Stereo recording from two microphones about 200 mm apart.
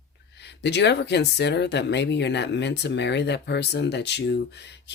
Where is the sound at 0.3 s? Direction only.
60° left (ahead or behind).